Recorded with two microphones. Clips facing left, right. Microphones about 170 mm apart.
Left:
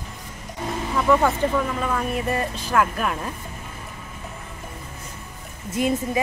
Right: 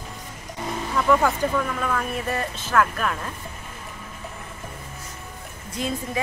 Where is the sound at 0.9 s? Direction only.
5° left (ahead or behind).